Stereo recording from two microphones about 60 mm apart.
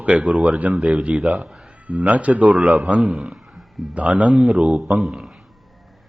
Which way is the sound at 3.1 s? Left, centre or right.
Centre.